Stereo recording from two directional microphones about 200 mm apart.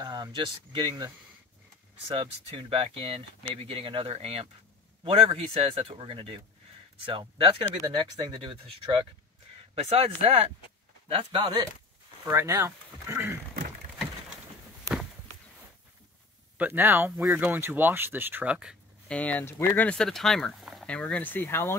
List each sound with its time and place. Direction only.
0.0 s speech: 20° right (ahead or behind)
2.1 s speech: 25° right (ahead or behind)
12.3 s speech: 15° right (ahead or behind)
16.5 s speech: 10° right (ahead or behind); by 21.7 s 10° left (ahead or behind)